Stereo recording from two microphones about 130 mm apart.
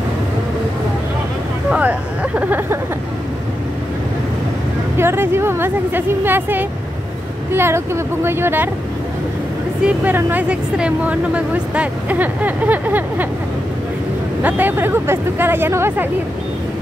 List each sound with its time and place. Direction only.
1.7 s speech: 10° right (ahead or behind)
4.9 s speech: 20° right (ahead or behind)
9.8 s speech: 15° right (ahead or behind)
14.4 s speech: 15° right (ahead or behind)